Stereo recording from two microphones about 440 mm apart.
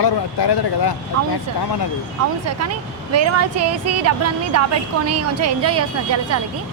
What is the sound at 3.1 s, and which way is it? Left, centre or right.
A woman's voice, right.